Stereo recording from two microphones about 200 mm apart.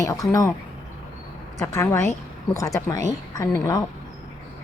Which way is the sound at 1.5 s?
15° left (ahead or behind).